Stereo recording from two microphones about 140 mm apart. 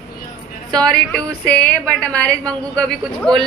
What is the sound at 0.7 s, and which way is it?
A woman's voice, 5° left (ahead or behind).